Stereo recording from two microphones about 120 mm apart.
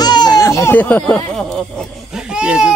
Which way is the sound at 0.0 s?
35° left (ahead or behind).